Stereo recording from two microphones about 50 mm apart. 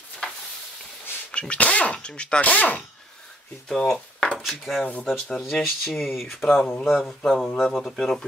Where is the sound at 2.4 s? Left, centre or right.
Left.